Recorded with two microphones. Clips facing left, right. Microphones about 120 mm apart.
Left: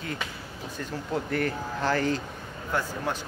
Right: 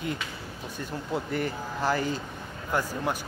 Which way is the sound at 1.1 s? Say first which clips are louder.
Left 2 dB; 5° right (ahead or behind).